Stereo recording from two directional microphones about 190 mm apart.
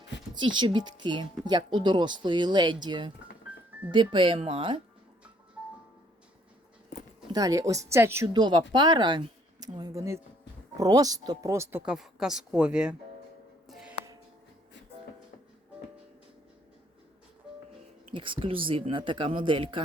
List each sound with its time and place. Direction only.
0.3 s speech: 25° right (ahead or behind)
7.3 s a woman's voice: 20° right (ahead or behind)
8.3 s a woman's voice: 25° right (ahead or behind)
11.9 s speech: 5° right (ahead or behind)
13.7 s music: centre (ahead or behind)
18.1 s speech: 25° right (ahead or behind)